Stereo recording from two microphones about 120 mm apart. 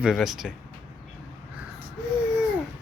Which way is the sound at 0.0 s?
5° right (ahead or behind).